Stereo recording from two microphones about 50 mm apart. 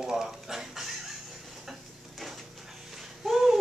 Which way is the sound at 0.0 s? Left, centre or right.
Centre.